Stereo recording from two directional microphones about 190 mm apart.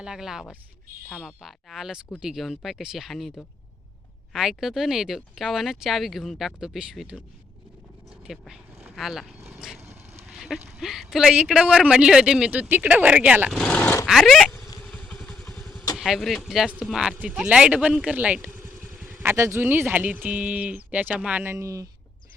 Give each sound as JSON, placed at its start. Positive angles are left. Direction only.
{"t": 0.0, "sound": "a man's voice", "side_deg": -5}
{"t": 8.3, "sound": "speech", "side_deg": 0}
{"t": 9.5, "sound": "vehicle", "side_deg": 0}
{"t": 10.2, "sound": "a sound", "side_deg": 0}
{"t": 10.7, "sound": "a man's voice", "side_deg": 0}
{"t": 14.1, "sound": "vehicle", "side_deg": 0}
{"t": 16.0, "sound": "a man's voice", "side_deg": 0}